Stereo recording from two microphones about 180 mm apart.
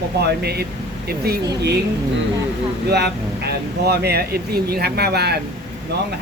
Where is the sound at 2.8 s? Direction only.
65° right (ahead or behind).